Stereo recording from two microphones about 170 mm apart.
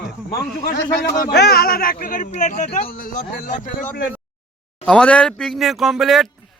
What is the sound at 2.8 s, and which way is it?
Speech, 55° left (ahead or behind).